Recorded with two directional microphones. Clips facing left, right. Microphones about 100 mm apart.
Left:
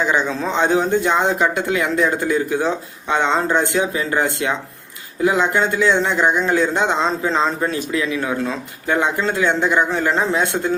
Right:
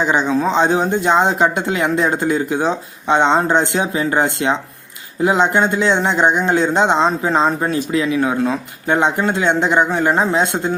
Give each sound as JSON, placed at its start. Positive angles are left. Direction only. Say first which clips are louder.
{"t": 0.0, "sound": "speech", "louder": "right 3 dB", "side_deg": -20}